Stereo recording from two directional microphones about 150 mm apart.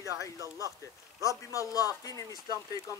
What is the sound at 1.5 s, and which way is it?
Speech, 25° left (ahead or behind).